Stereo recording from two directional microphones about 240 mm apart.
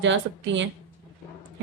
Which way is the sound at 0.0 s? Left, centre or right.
Right.